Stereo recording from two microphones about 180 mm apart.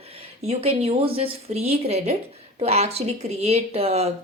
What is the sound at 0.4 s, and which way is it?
Speech, 35° right (ahead or behind).